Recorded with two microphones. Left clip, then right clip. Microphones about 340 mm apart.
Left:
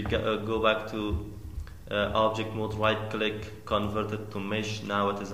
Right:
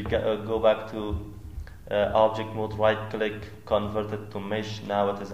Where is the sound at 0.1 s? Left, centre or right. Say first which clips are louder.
Right 3 dB; centre.